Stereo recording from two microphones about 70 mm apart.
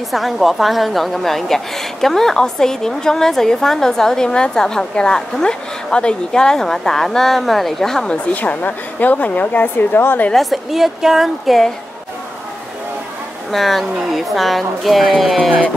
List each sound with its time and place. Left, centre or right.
0.1 s a woman's voice: centre
8.3 s a woman's voice: left
10.3 s speech: centre
13.5 s speech: centre